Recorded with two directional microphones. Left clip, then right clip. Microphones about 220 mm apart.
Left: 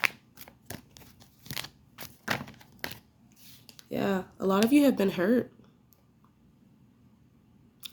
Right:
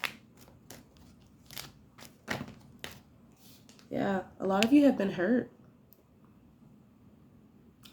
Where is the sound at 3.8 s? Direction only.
50° left (ahead or behind).